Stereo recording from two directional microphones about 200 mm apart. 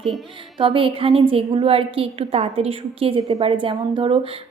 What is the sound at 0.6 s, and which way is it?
A woman's voice, 25° right (ahead or behind).